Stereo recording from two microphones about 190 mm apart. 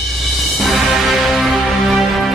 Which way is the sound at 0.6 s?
Centre (ahead or behind).